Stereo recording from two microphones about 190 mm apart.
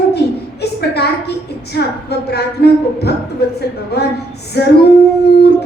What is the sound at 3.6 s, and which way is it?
A woman's voice, 60° left (ahead or behind).